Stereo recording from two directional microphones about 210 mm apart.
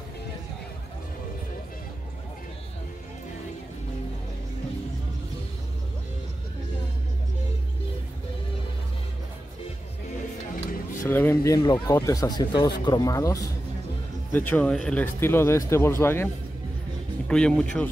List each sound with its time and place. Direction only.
11.1 s speech: 10° left (ahead or behind)
17.3 s speech: 5° left (ahead or behind)